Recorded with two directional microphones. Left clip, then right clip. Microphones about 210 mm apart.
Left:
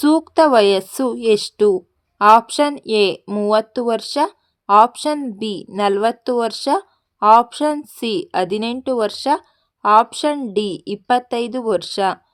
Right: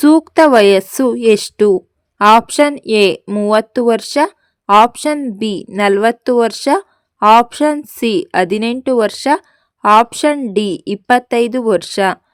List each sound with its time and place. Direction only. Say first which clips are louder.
0.0 s speech: right 5 dB; 35° right (ahead or behind)